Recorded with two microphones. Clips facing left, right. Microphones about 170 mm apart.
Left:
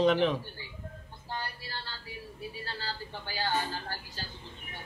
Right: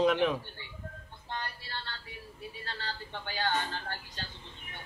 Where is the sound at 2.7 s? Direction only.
35° left (ahead or behind).